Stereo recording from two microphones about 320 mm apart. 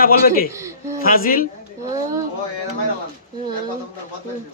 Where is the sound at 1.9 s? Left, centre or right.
Centre.